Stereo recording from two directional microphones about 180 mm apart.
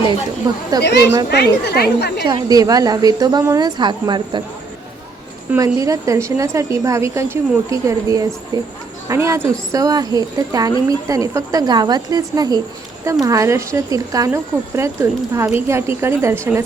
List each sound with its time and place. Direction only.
0.4 s a woman's voice: 20° right (ahead or behind)
1.3 s a woman's voice: 65° left (ahead or behind)
2.2 s a woman's voice: 20° right (ahead or behind)
5.5 s a woman's voice: 20° right (ahead or behind)